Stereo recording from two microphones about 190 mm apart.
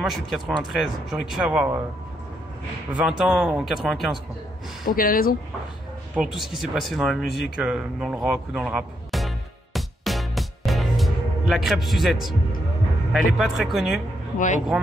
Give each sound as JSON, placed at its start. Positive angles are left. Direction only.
{"t": 0.0, "sound": "speech", "side_deg": 0}
{"t": 2.9, "sound": "speech", "side_deg": -5}
{"t": 4.8, "sound": "speech", "side_deg": 50}
{"t": 6.1, "sound": "speech", "side_deg": 0}
{"t": 9.8, "sound": "music", "side_deg": 0}
{"t": 13.1, "sound": "speech", "side_deg": 0}